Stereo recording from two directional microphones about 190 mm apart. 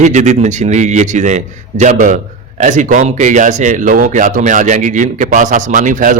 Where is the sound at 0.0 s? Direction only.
40° right (ahead or behind).